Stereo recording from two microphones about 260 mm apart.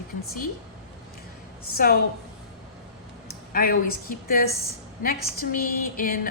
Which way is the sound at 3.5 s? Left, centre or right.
Left.